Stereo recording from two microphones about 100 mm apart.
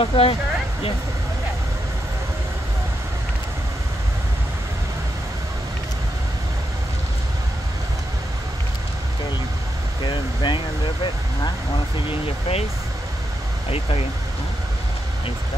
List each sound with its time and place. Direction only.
0.0 s speech: 65° left (ahead or behind)
10.0 s speech: 50° left (ahead or behind)
12.1 s speech: 80° left
13.7 s speech: 75° left (ahead or behind)